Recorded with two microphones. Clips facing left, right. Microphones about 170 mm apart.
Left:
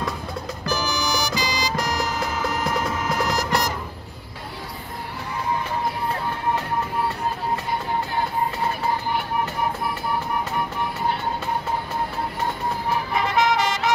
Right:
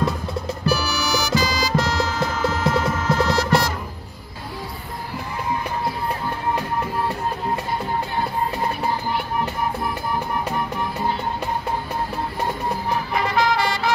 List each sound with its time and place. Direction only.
0.7 s music: 15° left (ahead or behind)
13.4 s music: 20° left (ahead or behind)